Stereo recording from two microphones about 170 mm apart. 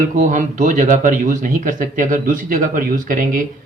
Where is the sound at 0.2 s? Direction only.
50° right (ahead or behind).